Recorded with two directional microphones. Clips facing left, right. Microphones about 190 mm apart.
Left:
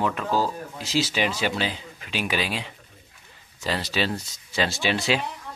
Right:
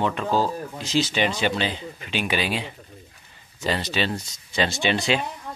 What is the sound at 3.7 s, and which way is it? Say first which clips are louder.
Speech: right 1 dB; 5° left (ahead or behind).